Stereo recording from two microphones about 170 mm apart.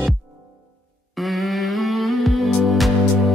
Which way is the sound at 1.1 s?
Centre (ahead or behind).